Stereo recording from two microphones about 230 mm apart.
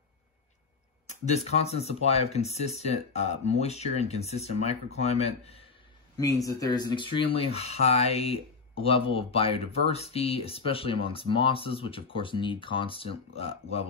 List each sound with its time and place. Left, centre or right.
1.0 s speech: left
6.1 s speech: centre